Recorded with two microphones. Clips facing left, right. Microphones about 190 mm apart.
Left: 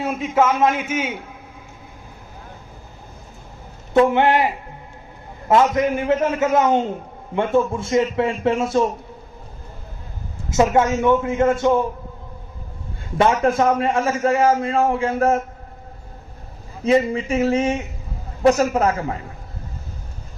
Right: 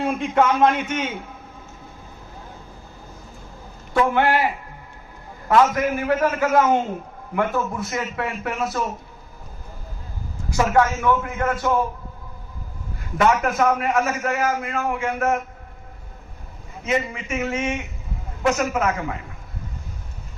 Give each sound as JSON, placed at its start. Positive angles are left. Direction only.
{"t": 0.0, "sound": "a man's voice", "side_deg": 5}
{"t": 3.9, "sound": "a man's voice", "side_deg": 20}
{"t": 5.5, "sound": "a man's voice", "side_deg": 25}
{"t": 10.5, "sound": "a man's voice", "side_deg": 20}
{"t": 13.1, "sound": "a man's voice", "side_deg": 30}
{"t": 16.8, "sound": "speech", "side_deg": 35}